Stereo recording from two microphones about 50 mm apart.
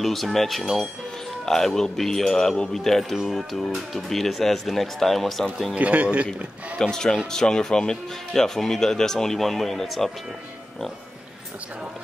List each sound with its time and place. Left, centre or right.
0.0 s speech: centre
5.8 s speech: right
6.8 s speech: centre